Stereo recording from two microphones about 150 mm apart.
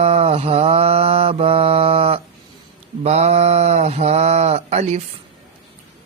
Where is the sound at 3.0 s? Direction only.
45° right (ahead or behind).